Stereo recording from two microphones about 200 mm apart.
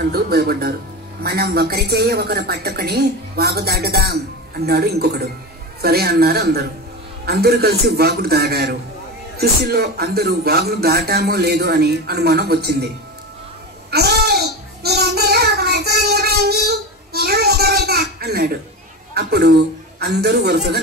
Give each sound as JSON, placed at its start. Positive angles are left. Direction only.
{"t": 0.0, "sound": "a woman's voice", "side_deg": -50}
{"t": 13.8, "sound": "child singing", "side_deg": -55}
{"t": 19.1, "sound": "a man's voice", "side_deg": -55}